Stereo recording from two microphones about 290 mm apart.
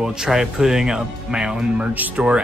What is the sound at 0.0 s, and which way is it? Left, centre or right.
Speech, centre.